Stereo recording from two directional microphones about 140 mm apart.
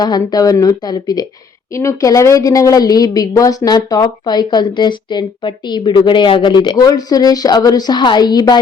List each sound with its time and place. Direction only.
0.0 s a woman's voice: 30° left (ahead or behind)